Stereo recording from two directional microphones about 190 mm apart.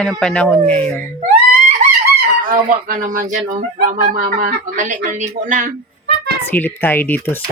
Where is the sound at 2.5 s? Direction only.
45° right (ahead or behind).